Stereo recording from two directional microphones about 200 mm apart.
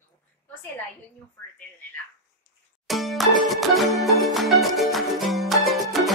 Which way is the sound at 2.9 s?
Centre (ahead or behind).